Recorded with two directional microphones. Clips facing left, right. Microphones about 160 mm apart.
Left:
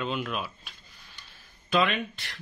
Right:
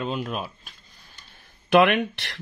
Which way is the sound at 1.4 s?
65° right (ahead or behind).